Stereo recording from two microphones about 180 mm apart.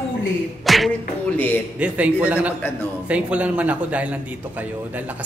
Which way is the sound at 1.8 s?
5° right (ahead or behind).